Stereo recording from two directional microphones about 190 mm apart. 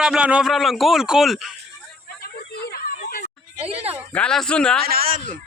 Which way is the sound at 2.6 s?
55° left (ahead or behind).